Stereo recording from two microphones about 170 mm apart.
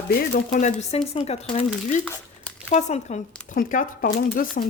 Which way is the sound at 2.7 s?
45° left (ahead or behind).